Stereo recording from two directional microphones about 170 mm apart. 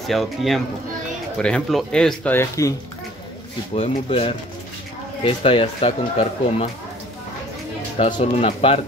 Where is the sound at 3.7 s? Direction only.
40° left (ahead or behind).